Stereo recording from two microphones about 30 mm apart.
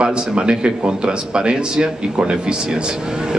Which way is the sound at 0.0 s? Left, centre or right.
Right.